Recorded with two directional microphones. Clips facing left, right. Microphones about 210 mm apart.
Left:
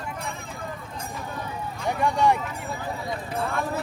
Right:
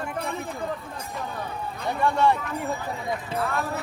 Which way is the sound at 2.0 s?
15° left (ahead or behind).